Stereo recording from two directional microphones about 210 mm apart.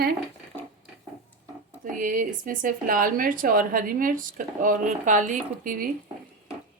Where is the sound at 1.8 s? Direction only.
40° right (ahead or behind).